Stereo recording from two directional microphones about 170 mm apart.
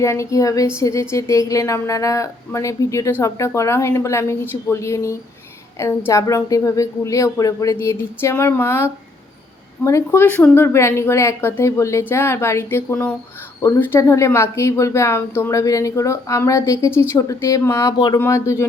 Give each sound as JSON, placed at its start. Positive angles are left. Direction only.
{"t": 0.0, "sound": "speech", "side_deg": 15}